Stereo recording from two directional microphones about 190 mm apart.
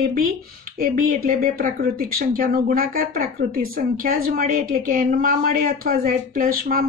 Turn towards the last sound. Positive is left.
turn(degrees=-50)  # may be behind; listen again after turning